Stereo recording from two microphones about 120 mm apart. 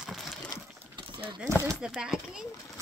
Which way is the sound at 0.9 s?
40° right (ahead or behind).